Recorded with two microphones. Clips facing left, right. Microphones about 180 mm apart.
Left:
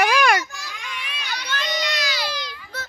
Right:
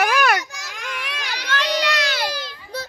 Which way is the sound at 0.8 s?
80° right.